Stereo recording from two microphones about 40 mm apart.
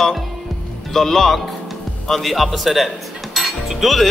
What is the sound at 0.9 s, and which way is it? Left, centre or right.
Speech, centre.